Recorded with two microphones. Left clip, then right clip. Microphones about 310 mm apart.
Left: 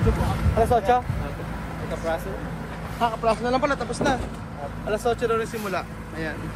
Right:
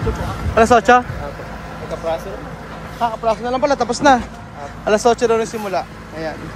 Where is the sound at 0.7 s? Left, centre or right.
Right.